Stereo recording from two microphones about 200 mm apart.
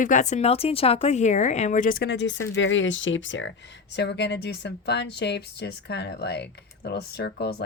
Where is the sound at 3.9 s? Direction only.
60° left (ahead or behind).